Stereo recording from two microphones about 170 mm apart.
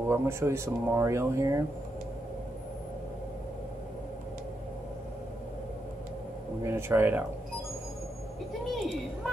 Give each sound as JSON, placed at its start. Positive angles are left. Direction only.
{"t": 0.1, "sound": "speech", "side_deg": -15}
{"t": 6.6, "sound": "speech", "side_deg": -15}
{"t": 8.7, "sound": "a sound", "side_deg": 0}